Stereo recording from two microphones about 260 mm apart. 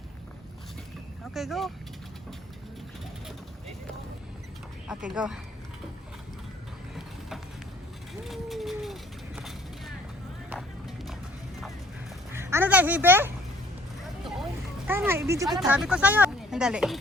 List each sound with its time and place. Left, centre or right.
1.2 s speech: centre
4.9 s speech: centre
8.2 s vehicle: centre
10.5 s music: centre
12.3 s a child's voice: centre
14.8 s speech: centre